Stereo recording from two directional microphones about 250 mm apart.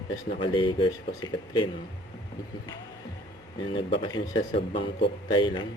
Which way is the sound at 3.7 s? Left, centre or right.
Centre.